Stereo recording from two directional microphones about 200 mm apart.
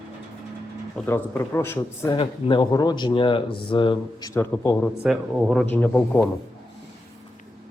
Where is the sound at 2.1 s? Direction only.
20° left (ahead or behind).